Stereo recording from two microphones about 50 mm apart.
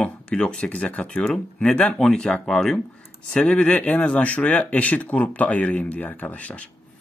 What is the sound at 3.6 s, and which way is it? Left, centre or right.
Speech, left.